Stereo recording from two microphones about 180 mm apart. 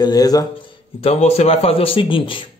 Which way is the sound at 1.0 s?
35° left (ahead or behind).